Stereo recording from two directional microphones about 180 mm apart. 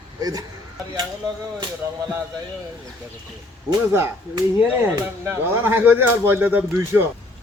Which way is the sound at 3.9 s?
15° right (ahead or behind).